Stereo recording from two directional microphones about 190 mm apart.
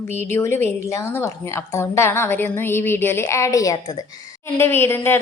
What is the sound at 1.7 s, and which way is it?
A woman's voice, 15° left (ahead or behind).